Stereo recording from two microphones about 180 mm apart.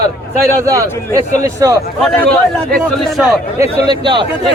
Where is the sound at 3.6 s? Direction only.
25° right (ahead or behind).